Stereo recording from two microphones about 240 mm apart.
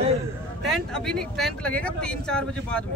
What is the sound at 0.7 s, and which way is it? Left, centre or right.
Speech, centre.